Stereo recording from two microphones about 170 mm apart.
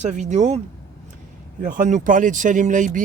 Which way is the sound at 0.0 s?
45° right (ahead or behind).